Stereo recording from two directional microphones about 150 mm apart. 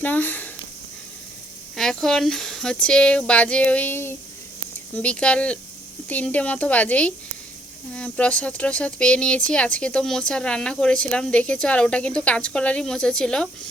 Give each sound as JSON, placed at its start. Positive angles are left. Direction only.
{"t": 0.0, "sound": "speech", "side_deg": 10}
{"t": 1.7, "sound": "speech", "side_deg": 5}